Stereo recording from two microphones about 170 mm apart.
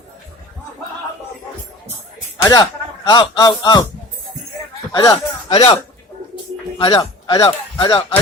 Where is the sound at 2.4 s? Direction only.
20° left (ahead or behind).